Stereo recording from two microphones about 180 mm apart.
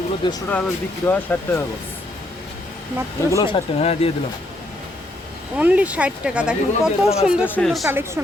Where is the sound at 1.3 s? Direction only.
10° left (ahead or behind).